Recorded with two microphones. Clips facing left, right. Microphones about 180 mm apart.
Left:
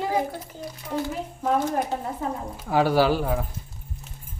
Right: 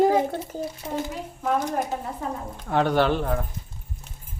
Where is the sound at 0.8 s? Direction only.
20° right (ahead or behind).